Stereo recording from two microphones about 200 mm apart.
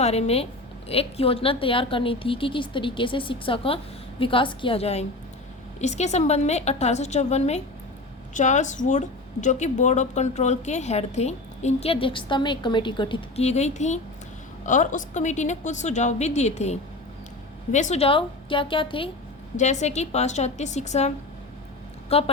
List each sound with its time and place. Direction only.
0.0 s a woman's voice: 30° left (ahead or behind)
19.5 s a woman's voice: 35° left (ahead or behind)
22.1 s a woman's voice: 30° left (ahead or behind)